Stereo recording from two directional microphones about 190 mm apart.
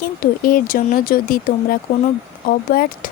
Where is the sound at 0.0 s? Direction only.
50° left (ahead or behind).